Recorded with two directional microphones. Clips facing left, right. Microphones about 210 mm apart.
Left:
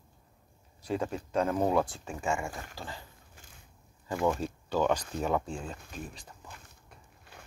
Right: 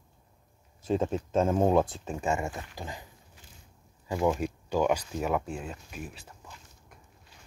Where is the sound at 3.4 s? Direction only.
50° left (ahead or behind).